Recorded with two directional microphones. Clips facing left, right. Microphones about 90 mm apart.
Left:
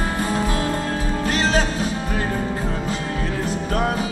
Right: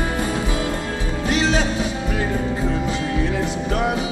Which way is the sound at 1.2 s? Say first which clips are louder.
Right 1 dB; 40° left (ahead or behind).